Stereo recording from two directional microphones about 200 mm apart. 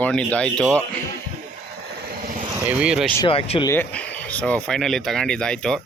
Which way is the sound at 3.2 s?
25° left (ahead or behind).